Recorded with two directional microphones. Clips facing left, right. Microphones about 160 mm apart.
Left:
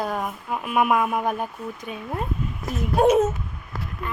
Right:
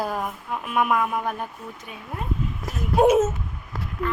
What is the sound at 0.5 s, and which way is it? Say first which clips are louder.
Speech: left 2 dB; 10° left (ahead or behind).